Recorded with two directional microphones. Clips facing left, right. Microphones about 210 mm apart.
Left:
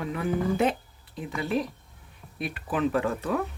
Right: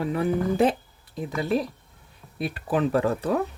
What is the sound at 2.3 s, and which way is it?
Speech, 35° right (ahead or behind).